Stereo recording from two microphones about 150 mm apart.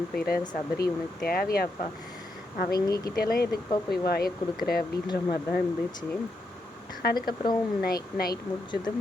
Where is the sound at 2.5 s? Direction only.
65° left (ahead or behind).